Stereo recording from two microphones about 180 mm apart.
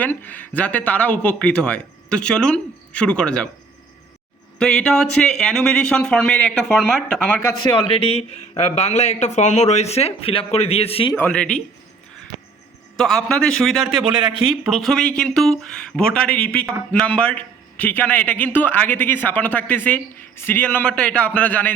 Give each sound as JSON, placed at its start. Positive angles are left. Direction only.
{"t": 0.0, "sound": "speech", "side_deg": 10}
{"t": 4.6, "sound": "speech", "side_deg": 5}
{"t": 7.7, "sound": "a man's voice", "side_deg": 30}
{"t": 11.2, "sound": "speech", "side_deg": 5}
{"t": 13.0, "sound": "speech", "side_deg": 0}